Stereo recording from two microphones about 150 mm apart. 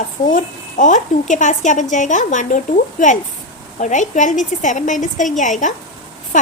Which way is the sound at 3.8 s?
55° left (ahead or behind).